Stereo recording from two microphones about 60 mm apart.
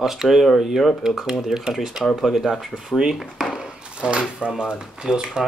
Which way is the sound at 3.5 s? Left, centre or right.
Centre.